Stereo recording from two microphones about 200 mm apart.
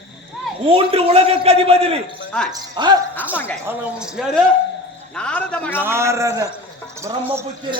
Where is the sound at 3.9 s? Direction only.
5° right (ahead or behind).